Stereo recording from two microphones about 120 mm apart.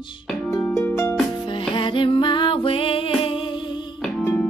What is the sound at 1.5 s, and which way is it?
Music, 45° left (ahead or behind).